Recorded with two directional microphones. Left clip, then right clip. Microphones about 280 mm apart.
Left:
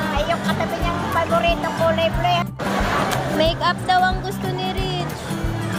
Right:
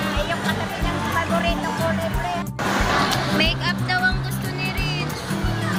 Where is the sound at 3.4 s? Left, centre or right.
Left.